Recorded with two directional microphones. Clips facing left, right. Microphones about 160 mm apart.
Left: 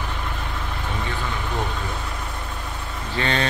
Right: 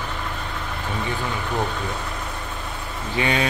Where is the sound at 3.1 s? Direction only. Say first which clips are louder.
Right 2 dB; 10° right (ahead or behind).